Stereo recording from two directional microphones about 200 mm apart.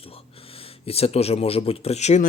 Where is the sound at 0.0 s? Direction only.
30° left (ahead or behind).